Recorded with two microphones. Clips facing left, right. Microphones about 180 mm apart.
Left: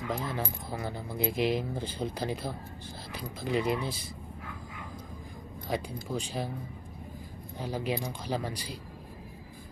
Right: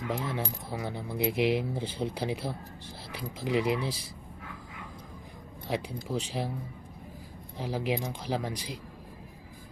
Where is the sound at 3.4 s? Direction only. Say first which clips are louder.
Right 2 dB; 90° right.